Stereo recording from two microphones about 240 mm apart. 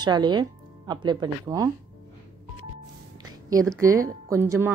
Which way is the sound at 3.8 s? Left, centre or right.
Centre.